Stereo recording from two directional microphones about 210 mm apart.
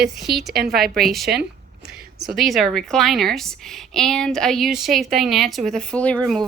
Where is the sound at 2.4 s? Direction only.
Centre (ahead or behind).